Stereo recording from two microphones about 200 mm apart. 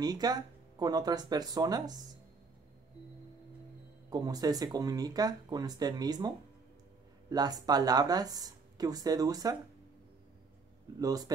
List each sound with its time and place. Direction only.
0.0 s speech: 20° right (ahead or behind)
4.1 s speech: 20° right (ahead or behind)
11.0 s speech: 20° right (ahead or behind)